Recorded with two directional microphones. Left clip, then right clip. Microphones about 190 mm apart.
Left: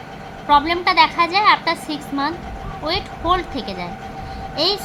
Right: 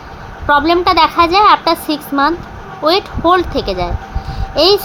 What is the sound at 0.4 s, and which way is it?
A woman's voice, 30° right (ahead or behind).